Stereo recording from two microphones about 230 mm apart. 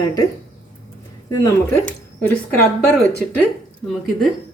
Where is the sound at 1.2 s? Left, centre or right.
Centre.